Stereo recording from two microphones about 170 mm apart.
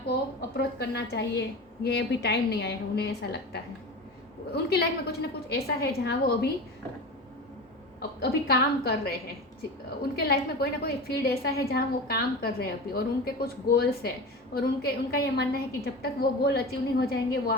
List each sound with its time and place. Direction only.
0.1 s a woman's voice: 75° left (ahead or behind)
8.2 s a woman's voice: 65° left (ahead or behind)
10.2 s a woman's voice: 65° left (ahead or behind)